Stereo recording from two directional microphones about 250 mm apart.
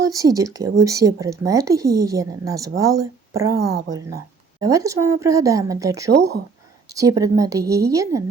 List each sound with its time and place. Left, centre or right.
0.0 s speech: centre
3.7 s a woman's voice: right
4.6 s speech: centre
6.1 s speech: right
6.9 s speech: centre